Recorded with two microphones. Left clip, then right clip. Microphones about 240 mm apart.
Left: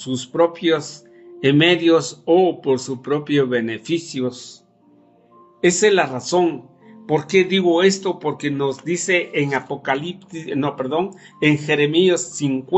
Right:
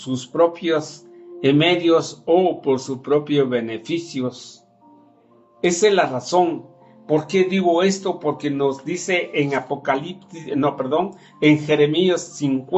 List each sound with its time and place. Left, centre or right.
0.0 s speech: left
5.5 s speech: left